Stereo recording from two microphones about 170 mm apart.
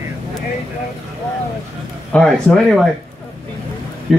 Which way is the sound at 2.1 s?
5° left (ahead or behind).